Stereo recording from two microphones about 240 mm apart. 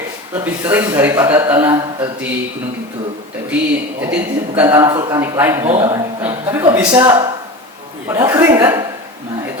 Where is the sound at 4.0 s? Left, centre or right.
Centre.